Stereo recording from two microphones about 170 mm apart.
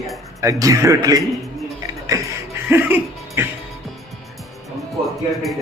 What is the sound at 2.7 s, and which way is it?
Speech, 10° right (ahead or behind).